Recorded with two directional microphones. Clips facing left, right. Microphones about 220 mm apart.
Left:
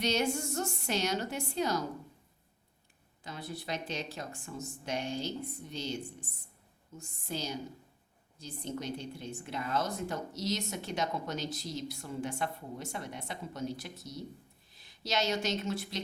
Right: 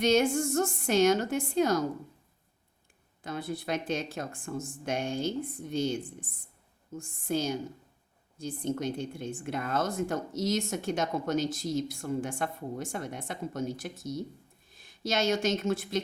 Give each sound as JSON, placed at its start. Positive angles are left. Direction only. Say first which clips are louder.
{"t": 0.0, "sound": "speech", "louder": "right 7 dB", "side_deg": -50}
{"t": 3.2, "sound": "speech", "louder": "right 6 dB", "side_deg": -50}